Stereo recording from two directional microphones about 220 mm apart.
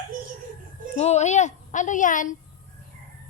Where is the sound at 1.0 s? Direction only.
30° left (ahead or behind).